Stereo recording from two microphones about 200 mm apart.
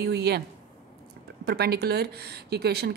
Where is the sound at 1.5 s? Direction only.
55° right (ahead or behind).